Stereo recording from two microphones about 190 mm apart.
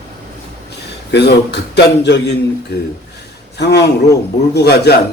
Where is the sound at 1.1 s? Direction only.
60° left (ahead or behind).